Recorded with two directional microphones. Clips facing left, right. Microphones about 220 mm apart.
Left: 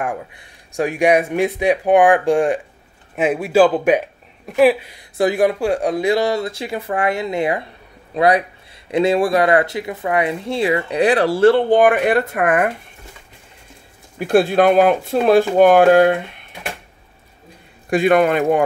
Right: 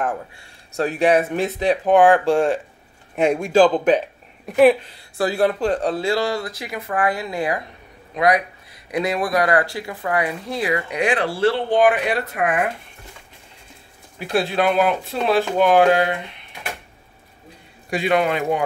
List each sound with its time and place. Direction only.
0.0 s speech: 15° left (ahead or behind)
4.8 s speech: 15° left (ahead or behind); by 12.6 s 50° left (ahead or behind)
14.2 s speech: 50° left (ahead or behind)
17.8 s speech: 50° left (ahead or behind)